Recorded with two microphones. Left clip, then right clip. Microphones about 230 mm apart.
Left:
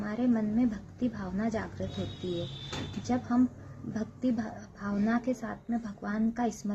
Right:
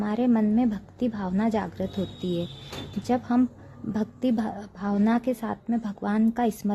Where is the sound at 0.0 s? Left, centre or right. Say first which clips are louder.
Right 6 dB; right.